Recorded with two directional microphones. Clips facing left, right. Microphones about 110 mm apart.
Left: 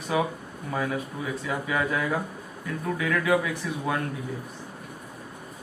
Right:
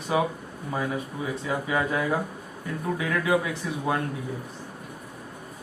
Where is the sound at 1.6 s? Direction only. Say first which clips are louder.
Even; 25° right (ahead or behind).